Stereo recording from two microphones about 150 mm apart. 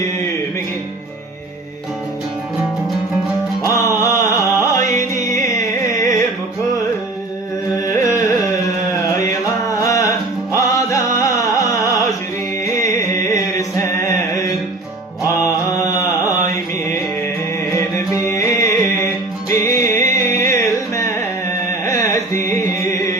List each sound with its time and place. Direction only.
3.7 s music: 20° left (ahead or behind)
7.8 s carnatic music: 20° left (ahead or behind)
8.9 s music: 20° left (ahead or behind)
17.7 s music: 20° left (ahead or behind)